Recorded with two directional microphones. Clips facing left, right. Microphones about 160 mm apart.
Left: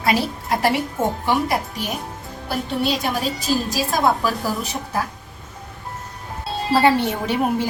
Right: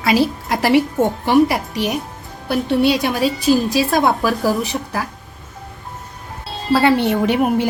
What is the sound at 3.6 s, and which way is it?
A woman's voice, 65° right (ahead or behind).